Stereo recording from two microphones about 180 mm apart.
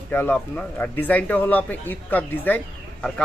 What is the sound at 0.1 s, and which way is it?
Speech, 10° left (ahead or behind).